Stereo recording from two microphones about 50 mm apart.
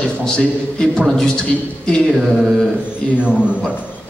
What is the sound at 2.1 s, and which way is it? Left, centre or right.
Mantra, centre.